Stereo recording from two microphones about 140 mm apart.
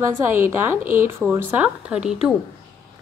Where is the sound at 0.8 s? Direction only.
75° right (ahead or behind).